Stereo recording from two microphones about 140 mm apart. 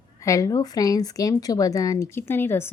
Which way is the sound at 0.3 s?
25° left (ahead or behind).